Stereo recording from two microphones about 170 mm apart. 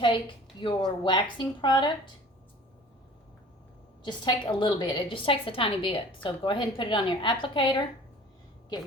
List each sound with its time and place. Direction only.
0.6 s a woman's voice: 25° left (ahead or behind)
4.0 s a woman's voice: 25° left (ahead or behind)